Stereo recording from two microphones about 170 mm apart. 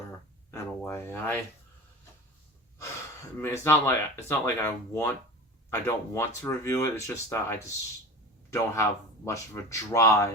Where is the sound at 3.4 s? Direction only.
15° left (ahead or behind).